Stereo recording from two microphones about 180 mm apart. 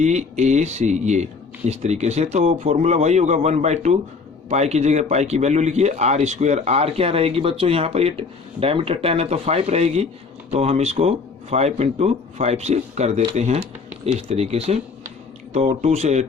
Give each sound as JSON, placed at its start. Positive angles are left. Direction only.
{"t": 0.0, "sound": "speech", "side_deg": -40}